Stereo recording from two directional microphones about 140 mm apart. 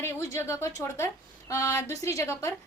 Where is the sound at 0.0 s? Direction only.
20° left (ahead or behind).